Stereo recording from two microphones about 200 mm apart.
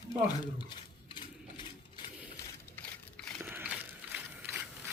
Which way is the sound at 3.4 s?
10° right (ahead or behind).